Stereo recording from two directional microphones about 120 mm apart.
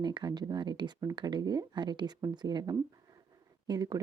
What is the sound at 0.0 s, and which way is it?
A woman's voice, 35° right (ahead or behind).